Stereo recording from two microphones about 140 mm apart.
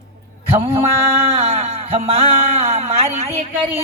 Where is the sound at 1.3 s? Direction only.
45° right (ahead or behind).